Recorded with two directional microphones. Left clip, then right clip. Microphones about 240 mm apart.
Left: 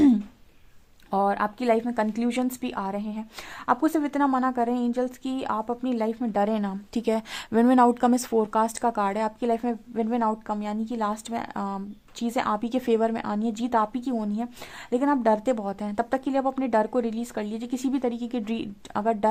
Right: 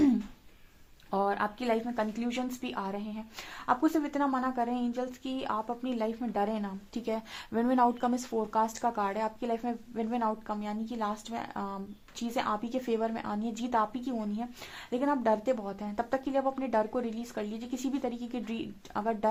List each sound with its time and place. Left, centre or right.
1.1 s a woman's voice: left